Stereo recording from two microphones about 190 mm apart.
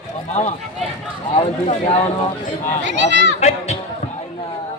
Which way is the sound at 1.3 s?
30° left (ahead or behind).